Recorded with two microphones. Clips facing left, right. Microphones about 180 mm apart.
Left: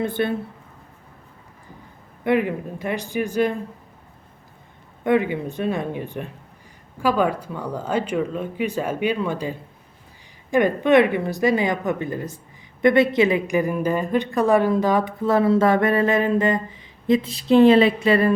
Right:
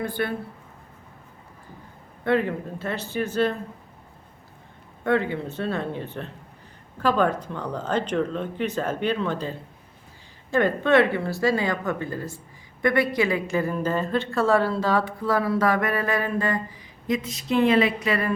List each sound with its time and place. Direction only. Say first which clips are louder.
0.0 s a woman's voice: left 5 dB; 25° left (ahead or behind)
2.2 s speech: left 2 dB; 15° left (ahead or behind)
5.0 s a woman's voice: left 3 dB; 15° left (ahead or behind)